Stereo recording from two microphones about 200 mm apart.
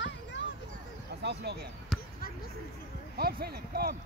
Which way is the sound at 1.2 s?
60° right (ahead or behind).